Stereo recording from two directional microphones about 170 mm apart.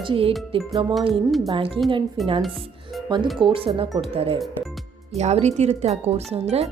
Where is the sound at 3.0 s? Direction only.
25° right (ahead or behind).